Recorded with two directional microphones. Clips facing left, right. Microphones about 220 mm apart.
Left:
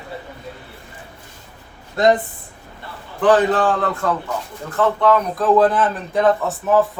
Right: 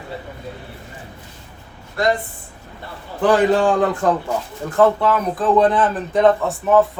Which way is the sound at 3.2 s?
10° right (ahead or behind).